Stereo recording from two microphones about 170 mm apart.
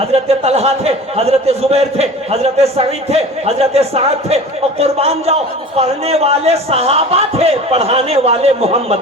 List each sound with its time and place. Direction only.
0.1 s a man's voice: 40° right (ahead or behind)